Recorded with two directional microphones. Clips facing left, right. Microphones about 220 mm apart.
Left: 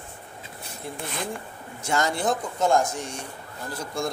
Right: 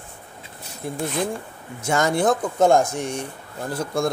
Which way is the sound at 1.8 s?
50° right (ahead or behind).